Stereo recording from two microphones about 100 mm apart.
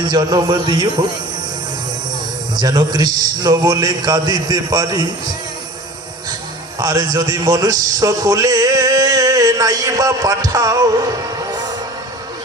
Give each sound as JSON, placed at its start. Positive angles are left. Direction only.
{"t": 0.0, "sound": "a man's voice", "side_deg": -45}
{"t": 2.6, "sound": "a man's voice", "side_deg": -45}
{"t": 6.7, "sound": "a man's voice", "side_deg": -40}